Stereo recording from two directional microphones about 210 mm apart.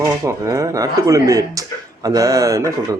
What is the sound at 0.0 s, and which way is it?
Speech, 15° right (ahead or behind).